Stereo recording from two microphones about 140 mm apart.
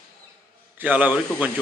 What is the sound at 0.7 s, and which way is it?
Speech, 10° right (ahead or behind).